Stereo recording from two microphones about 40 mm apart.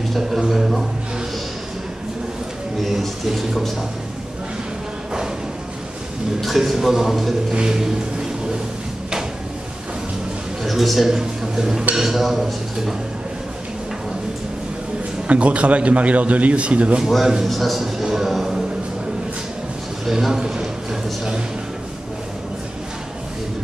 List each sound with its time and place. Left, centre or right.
0.5 s a sound: centre
3.3 s speech: centre
6.4 s a man's voice: centre
7.5 s vehicle: centre
10.6 s a sound: centre
11.1 s a man's voice: centre
15.2 s a man's voice: right
17.0 s a man's voice: centre
18.0 s a sound: centre
20.1 s a man's voice: centre
20.3 s a man's voice: right